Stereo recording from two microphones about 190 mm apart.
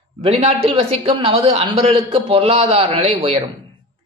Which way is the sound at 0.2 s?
30° right (ahead or behind).